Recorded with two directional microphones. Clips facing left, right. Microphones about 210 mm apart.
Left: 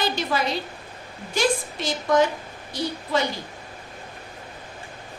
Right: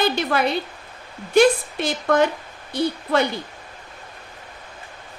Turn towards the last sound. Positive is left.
turn(degrees=-60)  # may be behind; listen again after turning